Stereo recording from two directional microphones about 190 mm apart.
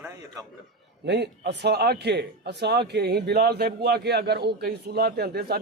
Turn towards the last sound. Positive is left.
turn(degrees=-55)  # may be behind; listen again after turning